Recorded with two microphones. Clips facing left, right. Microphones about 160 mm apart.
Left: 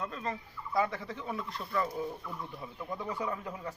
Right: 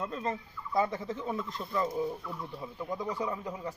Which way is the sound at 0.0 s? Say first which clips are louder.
Right 3 dB; 30° right (ahead or behind).